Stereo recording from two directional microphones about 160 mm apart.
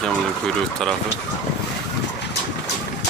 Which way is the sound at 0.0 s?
5° left (ahead or behind).